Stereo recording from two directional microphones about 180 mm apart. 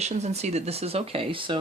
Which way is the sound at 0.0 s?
35° right (ahead or behind).